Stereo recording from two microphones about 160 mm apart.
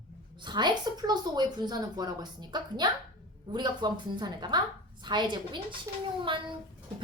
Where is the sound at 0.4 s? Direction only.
25° right (ahead or behind).